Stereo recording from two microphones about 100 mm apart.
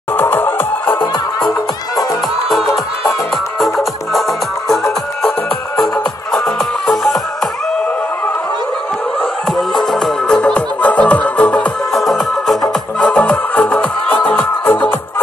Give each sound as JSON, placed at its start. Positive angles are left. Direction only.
{"t": 0.2, "sound": "music", "side_deg": 20}
{"t": 3.5, "sound": "music", "side_deg": 0}
{"t": 6.3, "sound": "music", "side_deg": 5}
{"t": 9.8, "sound": "music", "side_deg": 0}
{"t": 11.9, "sound": "music", "side_deg": 0}
{"t": 13.0, "sound": "music", "side_deg": 15}